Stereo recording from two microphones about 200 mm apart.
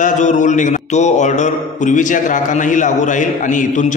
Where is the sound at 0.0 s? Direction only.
40° left (ahead or behind).